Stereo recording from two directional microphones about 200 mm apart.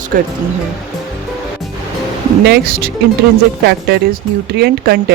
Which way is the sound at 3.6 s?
55° right (ahead or behind).